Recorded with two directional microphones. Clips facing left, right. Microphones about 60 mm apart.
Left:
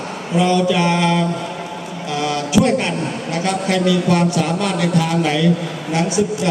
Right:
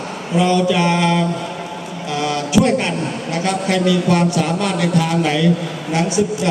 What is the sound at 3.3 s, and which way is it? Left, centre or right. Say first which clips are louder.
A man's voice: even; right.